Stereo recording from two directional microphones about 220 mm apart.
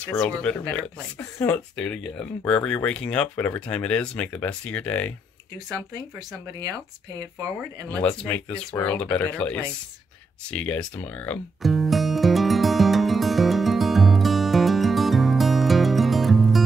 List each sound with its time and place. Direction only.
0.0 s speech: 5° left (ahead or behind)
5.7 s speech: 15° right (ahead or behind)
7.9 s speech: 5° left (ahead or behind)
10.5 s music: 5° left (ahead or behind)